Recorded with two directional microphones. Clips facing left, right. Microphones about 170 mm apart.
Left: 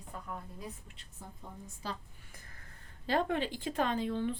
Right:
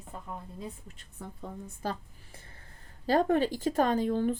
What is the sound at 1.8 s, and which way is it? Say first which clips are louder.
Speech: right 6 dB; 50° right (ahead or behind).